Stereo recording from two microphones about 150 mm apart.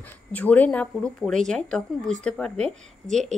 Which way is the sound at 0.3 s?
10° left (ahead or behind).